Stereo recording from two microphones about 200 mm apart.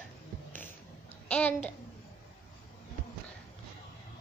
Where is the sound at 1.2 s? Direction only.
10° left (ahead or behind).